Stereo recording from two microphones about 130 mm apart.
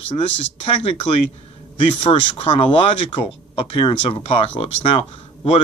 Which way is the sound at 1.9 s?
40° left (ahead or behind).